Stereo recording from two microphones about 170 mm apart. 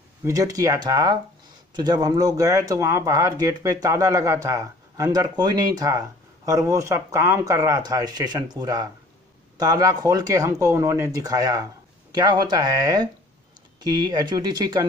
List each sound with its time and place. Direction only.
0.2 s speech: 20° right (ahead or behind)